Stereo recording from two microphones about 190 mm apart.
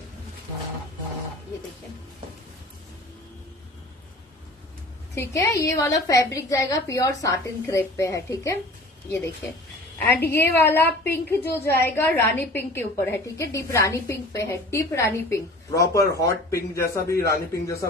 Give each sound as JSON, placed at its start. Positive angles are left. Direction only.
{"t": 5.1, "sound": "a woman's voice", "side_deg": 15}
{"t": 10.0, "sound": "a woman's voice", "side_deg": 10}